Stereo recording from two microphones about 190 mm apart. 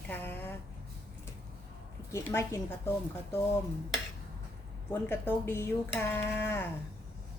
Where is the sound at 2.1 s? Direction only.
15° left (ahead or behind).